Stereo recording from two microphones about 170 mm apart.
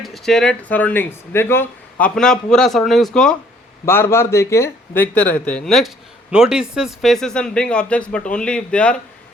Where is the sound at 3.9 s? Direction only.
15° left (ahead or behind).